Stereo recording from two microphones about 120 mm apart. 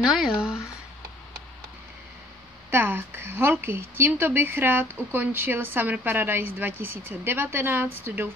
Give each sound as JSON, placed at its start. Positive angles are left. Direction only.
{"t": 0.0, "sound": "speech", "side_deg": -5}
{"t": 2.7, "sound": "speech", "side_deg": -15}